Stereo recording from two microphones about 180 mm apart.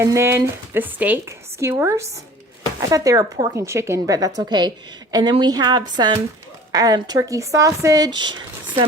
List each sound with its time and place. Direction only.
0.0 s speech: 15° right (ahead or behind)